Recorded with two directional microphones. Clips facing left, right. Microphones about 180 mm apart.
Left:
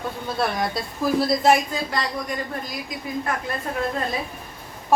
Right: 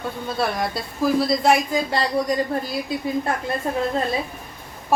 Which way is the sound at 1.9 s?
30° right (ahead or behind).